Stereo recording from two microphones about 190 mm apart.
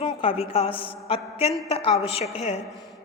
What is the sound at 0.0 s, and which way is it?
A woman's voice, 30° left (ahead or behind).